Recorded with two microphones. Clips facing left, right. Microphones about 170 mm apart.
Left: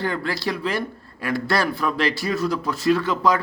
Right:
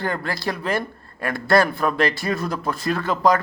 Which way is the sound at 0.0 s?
50° right (ahead or behind).